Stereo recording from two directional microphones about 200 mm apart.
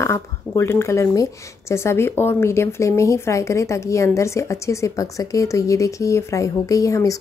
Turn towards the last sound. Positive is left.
turn(degrees=15)  # may be behind; listen again after turning